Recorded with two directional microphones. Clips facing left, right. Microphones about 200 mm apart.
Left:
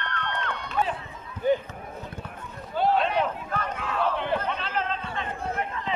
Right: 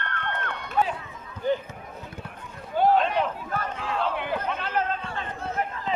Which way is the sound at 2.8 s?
45° right (ahead or behind).